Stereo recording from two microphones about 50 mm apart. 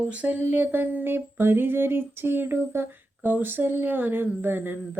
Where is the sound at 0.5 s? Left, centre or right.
Right.